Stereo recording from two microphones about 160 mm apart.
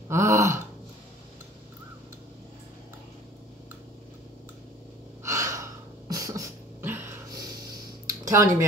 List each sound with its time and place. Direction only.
0.1 s gasp: 20° right (ahead or behind)
5.2 s gasp: 20° right (ahead or behind)
6.0 s beatboxing: 20° right (ahead or behind)
8.1 s a sound: 20° right (ahead or behind)